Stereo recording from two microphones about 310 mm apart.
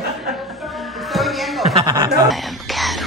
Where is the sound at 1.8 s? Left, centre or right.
Centre.